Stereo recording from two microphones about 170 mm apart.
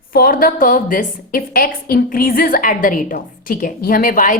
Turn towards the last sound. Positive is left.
turn(degrees=50)  # may be behind; listen again after turning